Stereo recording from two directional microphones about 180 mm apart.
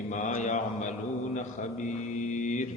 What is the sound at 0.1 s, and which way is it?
Mantra, 45° left (ahead or behind).